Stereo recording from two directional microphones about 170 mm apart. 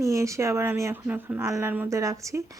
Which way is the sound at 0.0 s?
15° right (ahead or behind).